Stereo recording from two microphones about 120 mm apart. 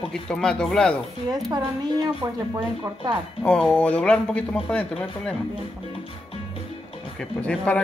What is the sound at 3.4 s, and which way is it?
A man's voice, 10° left (ahead or behind).